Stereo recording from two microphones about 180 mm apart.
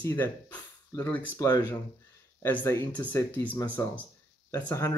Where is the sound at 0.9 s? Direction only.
10° left (ahead or behind).